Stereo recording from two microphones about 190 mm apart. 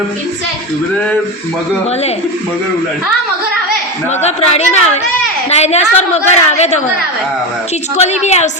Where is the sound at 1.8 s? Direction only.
35° left (ahead or behind).